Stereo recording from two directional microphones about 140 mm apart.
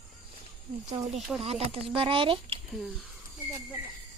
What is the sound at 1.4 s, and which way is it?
Speech, 45° right (ahead or behind).